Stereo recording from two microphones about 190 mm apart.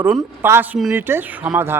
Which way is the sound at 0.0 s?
10° right (ahead or behind).